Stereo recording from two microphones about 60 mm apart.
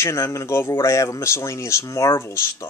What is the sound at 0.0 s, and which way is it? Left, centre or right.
Speech, left.